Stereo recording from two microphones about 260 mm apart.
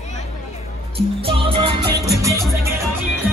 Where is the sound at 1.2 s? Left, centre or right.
Centre.